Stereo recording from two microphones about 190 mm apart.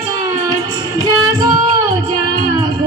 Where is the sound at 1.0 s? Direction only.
20° right (ahead or behind).